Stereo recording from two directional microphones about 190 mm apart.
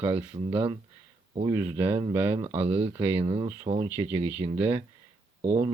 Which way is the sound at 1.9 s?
25° right (ahead or behind).